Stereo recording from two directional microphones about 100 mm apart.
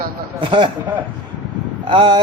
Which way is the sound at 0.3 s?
55° right (ahead or behind).